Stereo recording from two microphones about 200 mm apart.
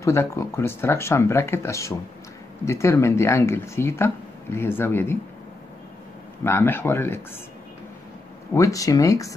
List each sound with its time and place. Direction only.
0.0 s speech: 15° left (ahead or behind)
6.4 s speech: 10° left (ahead or behind)
8.5 s speech: 15° left (ahead or behind)